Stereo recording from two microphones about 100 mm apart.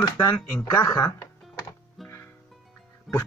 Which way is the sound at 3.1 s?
Centre (ahead or behind).